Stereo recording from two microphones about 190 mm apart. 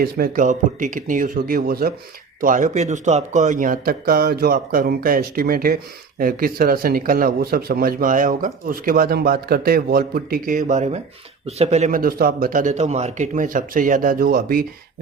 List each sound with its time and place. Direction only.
0.0 s speech: 50° right (ahead or behind)